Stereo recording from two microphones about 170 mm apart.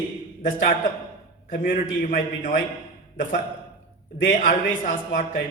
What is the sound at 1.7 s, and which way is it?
Speech, 55° left (ahead or behind).